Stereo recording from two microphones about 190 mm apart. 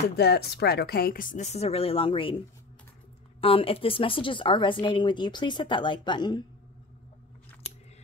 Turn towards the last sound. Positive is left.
turn(degrees=25)  # may be behind; listen again after turning